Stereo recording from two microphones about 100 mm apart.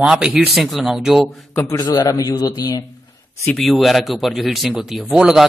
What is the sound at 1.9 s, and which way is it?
Speech, 40° left (ahead or behind).